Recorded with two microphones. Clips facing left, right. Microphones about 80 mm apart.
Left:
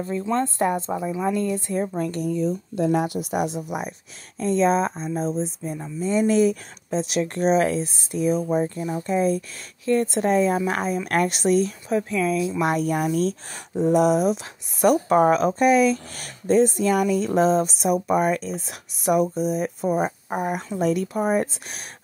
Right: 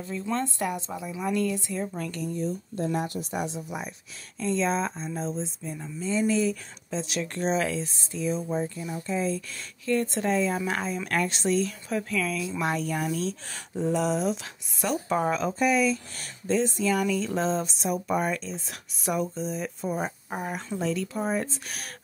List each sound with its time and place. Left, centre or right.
0.3 s a woman's voice: left
1.7 s a woman's voice: left
2.2 s speech: left
3.2 s speech: left
4.4 s speech: left
7.8 s speech: right
8.2 s speech: left
8.6 s a woman's voice: left
9.0 s speech: left
10.1 s a woman's voice: left
11.9 s a woman's voice: left
19.0 s speech: left